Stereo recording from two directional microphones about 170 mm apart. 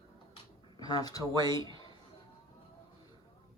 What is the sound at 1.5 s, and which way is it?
Speech, 30° right (ahead or behind).